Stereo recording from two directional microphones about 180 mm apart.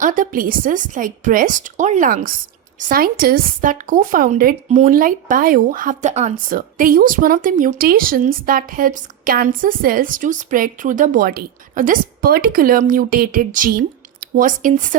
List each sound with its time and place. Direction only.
0.0 s a woman's voice: 45° right (ahead or behind)